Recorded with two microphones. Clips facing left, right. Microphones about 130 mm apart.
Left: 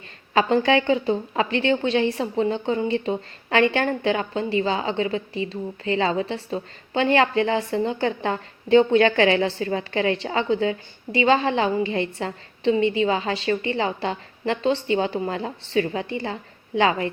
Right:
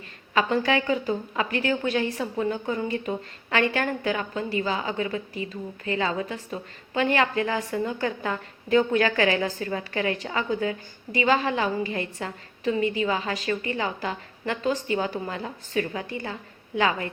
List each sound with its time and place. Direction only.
0.3 s a woman's voice: 30° left (ahead or behind)